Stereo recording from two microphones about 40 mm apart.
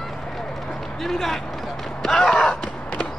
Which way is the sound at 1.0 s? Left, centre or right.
Centre.